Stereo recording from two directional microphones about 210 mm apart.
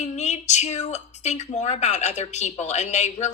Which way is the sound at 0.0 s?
35° left (ahead or behind).